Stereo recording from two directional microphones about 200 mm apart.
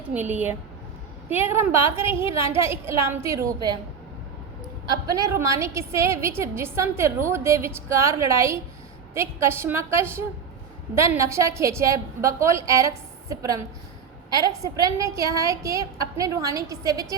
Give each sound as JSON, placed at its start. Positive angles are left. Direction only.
{"t": 0.1, "sound": "a woman's voice", "side_deg": -10}
{"t": 4.9, "sound": "a woman's voice", "side_deg": -15}